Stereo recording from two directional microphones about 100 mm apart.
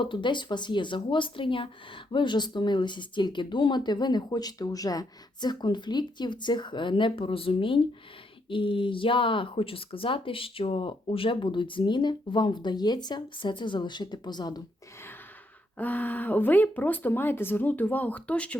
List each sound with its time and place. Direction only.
0.0 s speech: 55° left (ahead or behind)
15.8 s speech: 15° left (ahead or behind)